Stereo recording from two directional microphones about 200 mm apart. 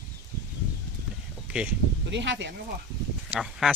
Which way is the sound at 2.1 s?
60° right (ahead or behind).